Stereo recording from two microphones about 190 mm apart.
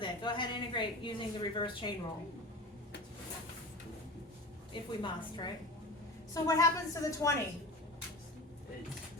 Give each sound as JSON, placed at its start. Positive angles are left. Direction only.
{"t": 0.0, "sound": "a woman's voice", "side_deg": 25}
{"t": 4.7, "sound": "a woman's voice", "side_deg": 25}